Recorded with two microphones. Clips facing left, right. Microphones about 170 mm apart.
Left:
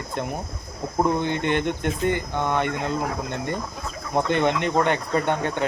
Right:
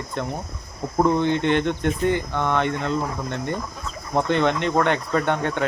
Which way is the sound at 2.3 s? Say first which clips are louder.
Right 1 dB; 10° left (ahead or behind).